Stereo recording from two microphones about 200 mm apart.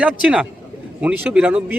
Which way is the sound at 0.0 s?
5° right (ahead or behind).